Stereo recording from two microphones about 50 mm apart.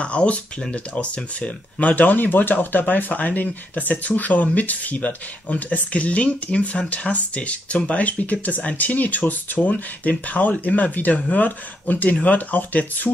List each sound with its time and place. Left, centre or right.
0.0 s speech: left